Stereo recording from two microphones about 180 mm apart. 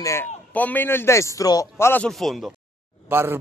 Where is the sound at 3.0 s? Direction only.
10° right (ahead or behind).